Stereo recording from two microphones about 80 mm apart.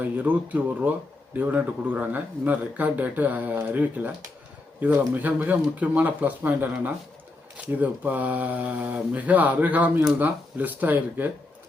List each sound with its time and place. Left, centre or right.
0.0 s speech: right